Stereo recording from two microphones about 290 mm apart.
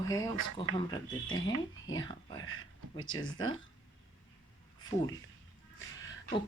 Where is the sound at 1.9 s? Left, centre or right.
Centre.